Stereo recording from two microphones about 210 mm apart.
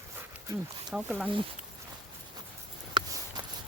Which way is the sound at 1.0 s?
5° right (ahead or behind).